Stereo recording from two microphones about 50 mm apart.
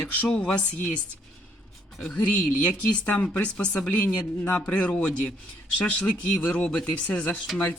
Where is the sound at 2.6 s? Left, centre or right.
Left.